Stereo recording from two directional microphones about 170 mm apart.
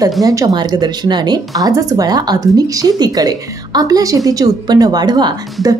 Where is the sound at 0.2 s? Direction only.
20° right (ahead or behind).